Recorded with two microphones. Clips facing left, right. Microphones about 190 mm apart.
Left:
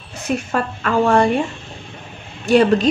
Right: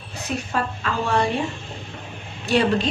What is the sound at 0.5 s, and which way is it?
Speech, 55° left (ahead or behind).